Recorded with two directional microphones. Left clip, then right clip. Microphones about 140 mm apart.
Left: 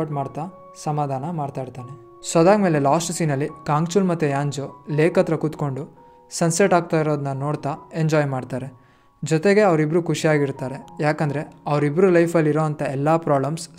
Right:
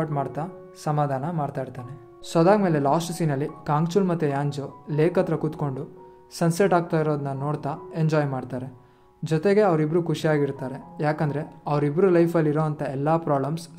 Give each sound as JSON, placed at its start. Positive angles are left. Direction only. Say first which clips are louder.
{"t": 0.0, "sound": "speech", "louder": "left 1 dB", "side_deg": 35}